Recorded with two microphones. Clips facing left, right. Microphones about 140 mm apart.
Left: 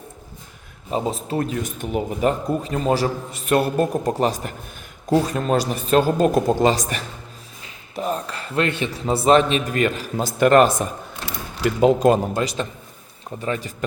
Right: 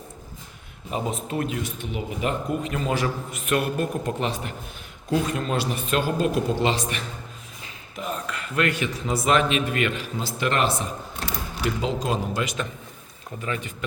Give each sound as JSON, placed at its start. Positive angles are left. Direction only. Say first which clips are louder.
{"t": 0.9, "sound": "a man's voice", "louder": "left 4 dB", "side_deg": 35}
{"t": 11.8, "sound": "speech", "louder": "left 14 dB", "side_deg": 50}
{"t": 12.4, "sound": "a man's voice", "louder": "left 4 dB", "side_deg": 35}